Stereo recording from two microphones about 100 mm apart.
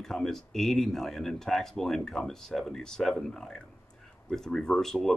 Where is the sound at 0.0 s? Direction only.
5° left (ahead or behind).